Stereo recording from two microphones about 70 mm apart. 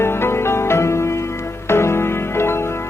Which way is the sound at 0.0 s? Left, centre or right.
Left.